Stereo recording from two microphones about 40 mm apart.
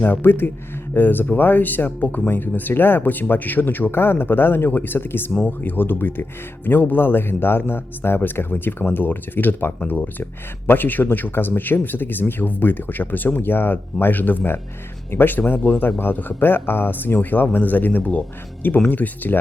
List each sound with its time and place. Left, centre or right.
0.0 s speech: left
18.9 s speech: left